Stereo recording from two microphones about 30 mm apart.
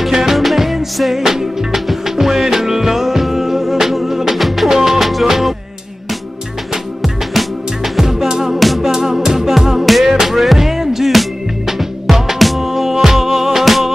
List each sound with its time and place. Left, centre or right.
0.0 s music: centre
1.1 s music: centre
4.6 s music: centre
5.0 s music: centre
7.3 s music: centre
8.0 s music: centre
8.5 s music: centre
8.8 s music: centre